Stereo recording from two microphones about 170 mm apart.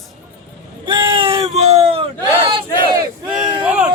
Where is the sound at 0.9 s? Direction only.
30° right (ahead or behind).